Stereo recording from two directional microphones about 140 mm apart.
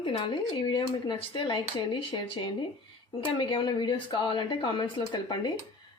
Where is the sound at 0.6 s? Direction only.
35° left (ahead or behind).